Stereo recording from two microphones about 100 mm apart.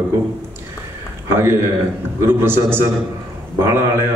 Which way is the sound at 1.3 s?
25° right (ahead or behind).